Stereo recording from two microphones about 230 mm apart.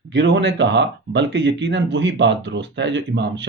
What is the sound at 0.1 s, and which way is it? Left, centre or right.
Speech, right.